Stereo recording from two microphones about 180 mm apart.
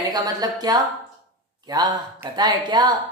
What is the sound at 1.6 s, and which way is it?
A woman's voice, 20° right (ahead or behind).